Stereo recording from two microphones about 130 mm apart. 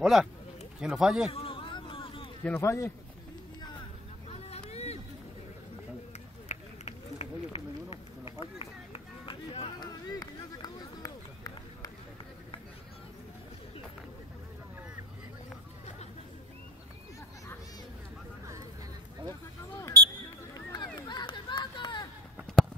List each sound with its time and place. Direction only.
0.0 s speech: 5° right (ahead or behind)
1.3 s a sound: 45° left (ahead or behind)
2.4 s speech: 20° left (ahead or behind)
4.3 s vehicle: 55° left (ahead or behind)
6.5 s run: 55° left (ahead or behind); by 11.9 s 30° left (ahead or behind)
20.2 s a sound: 30° left (ahead or behind)